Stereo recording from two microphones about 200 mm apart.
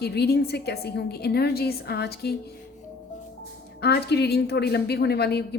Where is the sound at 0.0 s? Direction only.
55° left (ahead or behind).